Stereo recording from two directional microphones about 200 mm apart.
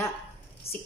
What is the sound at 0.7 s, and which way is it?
Speech, 30° left (ahead or behind).